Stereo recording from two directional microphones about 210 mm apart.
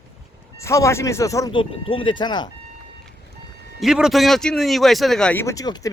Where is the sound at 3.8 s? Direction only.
Centre (ahead or behind).